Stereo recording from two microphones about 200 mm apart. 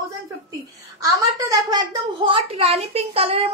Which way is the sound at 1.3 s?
15° right (ahead or behind).